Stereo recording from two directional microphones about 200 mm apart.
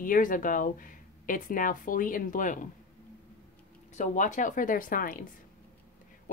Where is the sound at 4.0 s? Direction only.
40° left (ahead or behind).